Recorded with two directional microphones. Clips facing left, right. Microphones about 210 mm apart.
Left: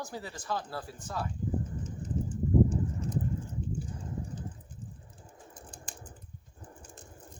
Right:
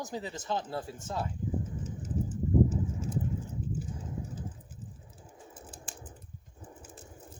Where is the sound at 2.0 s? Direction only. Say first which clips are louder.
Left 1 dB; 5° right (ahead or behind).